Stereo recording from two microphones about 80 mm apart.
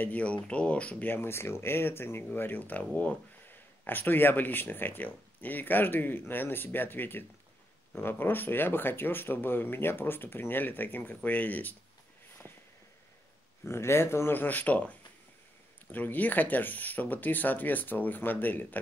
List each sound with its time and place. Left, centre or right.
0.0 s speech: centre
1.1 s speech: left
13.7 s speech: left